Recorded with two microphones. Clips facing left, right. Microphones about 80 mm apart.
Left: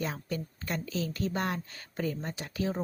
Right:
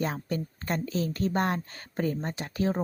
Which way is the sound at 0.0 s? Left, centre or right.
Right.